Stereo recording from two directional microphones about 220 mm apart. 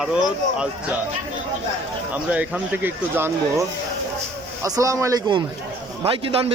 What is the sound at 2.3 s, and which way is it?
Speech, 5° right (ahead or behind).